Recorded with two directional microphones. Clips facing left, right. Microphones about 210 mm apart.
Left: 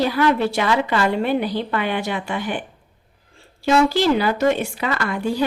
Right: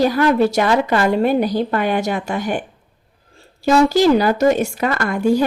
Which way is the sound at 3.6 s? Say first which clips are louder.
Right 4 dB; 40° right (ahead or behind).